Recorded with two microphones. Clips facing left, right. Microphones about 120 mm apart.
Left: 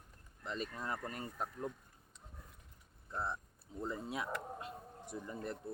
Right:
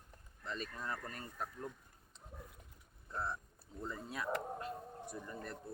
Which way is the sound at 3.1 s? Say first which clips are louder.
Left 1 dB; 20° left (ahead or behind).